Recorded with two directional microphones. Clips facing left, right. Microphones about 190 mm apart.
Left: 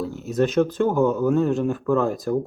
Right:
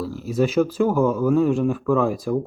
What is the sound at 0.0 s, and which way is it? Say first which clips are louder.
Speech: even; 5° right (ahead or behind).